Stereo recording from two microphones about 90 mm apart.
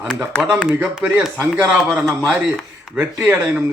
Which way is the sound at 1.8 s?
5° right (ahead or behind).